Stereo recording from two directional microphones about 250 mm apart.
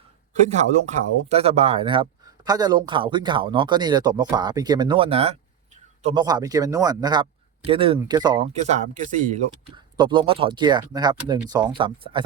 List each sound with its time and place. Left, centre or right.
0.4 s speech: right
8.6 s speech: right
9.7 s speech: centre